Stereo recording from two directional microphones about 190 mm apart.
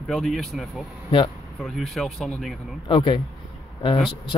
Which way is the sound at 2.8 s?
25° left (ahead or behind).